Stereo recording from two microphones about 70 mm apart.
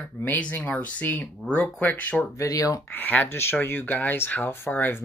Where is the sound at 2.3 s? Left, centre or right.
Left.